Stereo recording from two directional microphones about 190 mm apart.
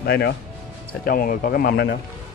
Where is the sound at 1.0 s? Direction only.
50° left (ahead or behind).